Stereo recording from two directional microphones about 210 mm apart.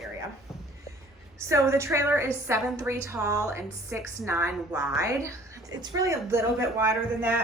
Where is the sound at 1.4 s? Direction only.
15° right (ahead or behind).